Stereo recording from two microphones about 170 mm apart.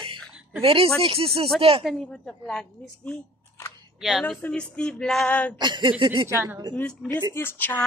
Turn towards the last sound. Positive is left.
turn(degrees=10)  # may be behind; listen again after turning